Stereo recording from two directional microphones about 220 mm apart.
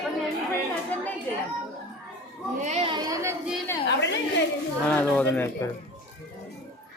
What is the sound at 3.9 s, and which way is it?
Speech, 50° left (ahead or behind).